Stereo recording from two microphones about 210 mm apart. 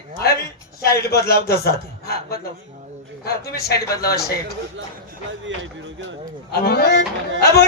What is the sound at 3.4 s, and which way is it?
Speech, 50° left (ahead or behind).